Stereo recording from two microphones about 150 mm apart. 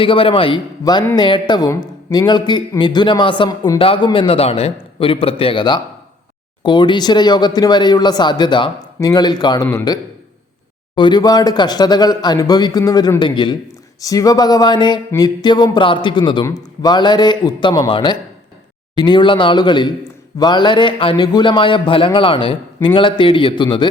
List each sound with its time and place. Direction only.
0.0 s a man's voice: 35° left (ahead or behind)